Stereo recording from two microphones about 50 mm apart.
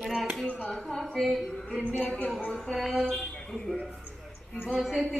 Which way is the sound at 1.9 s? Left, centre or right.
Left.